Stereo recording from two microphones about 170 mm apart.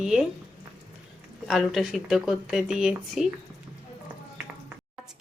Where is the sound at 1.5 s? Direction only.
Centre (ahead or behind).